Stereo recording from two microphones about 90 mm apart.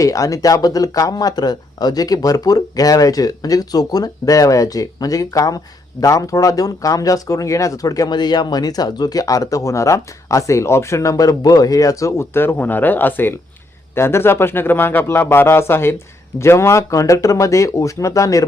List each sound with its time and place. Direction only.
0.0 s a man's voice: 40° left (ahead or behind)